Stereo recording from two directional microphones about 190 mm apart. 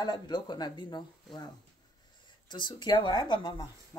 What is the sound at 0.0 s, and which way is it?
Speech, 20° left (ahead or behind).